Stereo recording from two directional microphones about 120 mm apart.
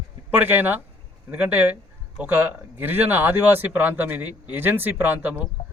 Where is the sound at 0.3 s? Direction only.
15° right (ahead or behind).